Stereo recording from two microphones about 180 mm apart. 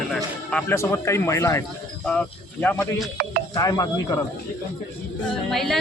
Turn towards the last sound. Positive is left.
turn(degrees=0)  # may be behind; listen again after turning